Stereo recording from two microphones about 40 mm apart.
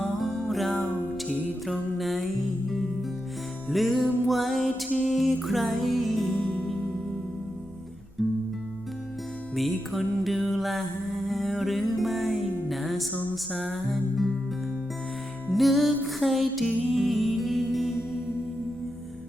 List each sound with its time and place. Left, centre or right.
0.2 s music: centre
2.0 s music: centre
3.7 s music: centre
6.3 s music: left
8.2 s guitar: centre
9.6 s music: centre
15.4 s music: centre